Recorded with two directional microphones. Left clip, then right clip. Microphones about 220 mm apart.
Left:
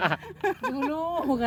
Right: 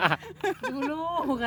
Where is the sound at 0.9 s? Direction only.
15° left (ahead or behind).